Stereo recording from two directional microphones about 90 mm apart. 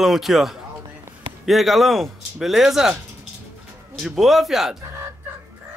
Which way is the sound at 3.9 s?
Centre (ahead or behind).